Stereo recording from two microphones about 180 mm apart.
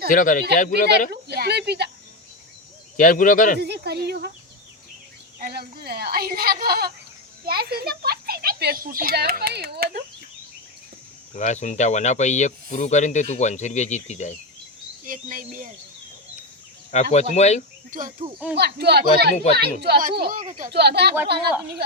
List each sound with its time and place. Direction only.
0.1 s speech: 50° left (ahead or behind)
1.1 s a child's voice: 65° right (ahead or behind)
3.0 s speech: 50° left (ahead or behind)
3.6 s a child's voice: 65° right (ahead or behind)
5.4 s a child's voice: 55° right (ahead or behind)
11.3 s speech: 40° left (ahead or behind)
15.0 s speech: 50° right (ahead or behind)
16.9 s speech: 40° left (ahead or behind)
18.5 s a child's voice: 65° right (ahead or behind); by 20.7 s 45° right (ahead or behind)
20.7 s a child's voice: 65° right (ahead or behind)